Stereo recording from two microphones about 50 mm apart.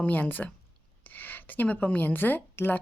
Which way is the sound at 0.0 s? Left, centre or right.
Left.